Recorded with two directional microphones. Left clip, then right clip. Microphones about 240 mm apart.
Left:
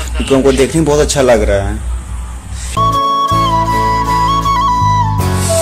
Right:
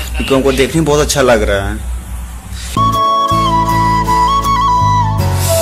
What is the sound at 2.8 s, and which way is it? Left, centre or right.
Flute, centre.